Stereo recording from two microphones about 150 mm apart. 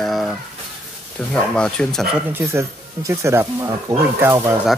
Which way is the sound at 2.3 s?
15° right (ahead or behind).